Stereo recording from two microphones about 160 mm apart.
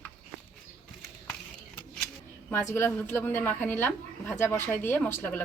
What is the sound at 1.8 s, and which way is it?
Speech, 5° left (ahead or behind).